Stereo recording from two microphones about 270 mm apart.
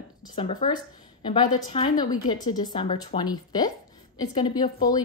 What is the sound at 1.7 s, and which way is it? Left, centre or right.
Speech, centre.